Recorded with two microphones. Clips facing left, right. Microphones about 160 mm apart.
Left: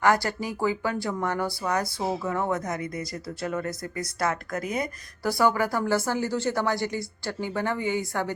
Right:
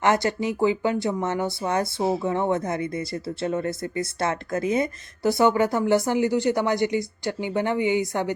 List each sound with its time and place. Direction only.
0.0 s speech: 20° right (ahead or behind)